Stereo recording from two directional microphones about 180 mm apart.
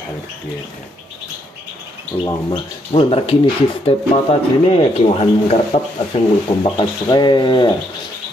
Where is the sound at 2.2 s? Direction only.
30° left (ahead or behind).